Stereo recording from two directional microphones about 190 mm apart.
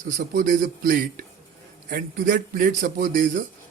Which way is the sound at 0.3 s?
50° right (ahead or behind).